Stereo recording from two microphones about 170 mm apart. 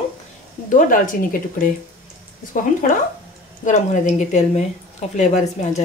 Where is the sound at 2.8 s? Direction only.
55° left (ahead or behind).